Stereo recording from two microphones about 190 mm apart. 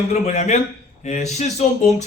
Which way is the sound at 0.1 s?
35° left (ahead or behind).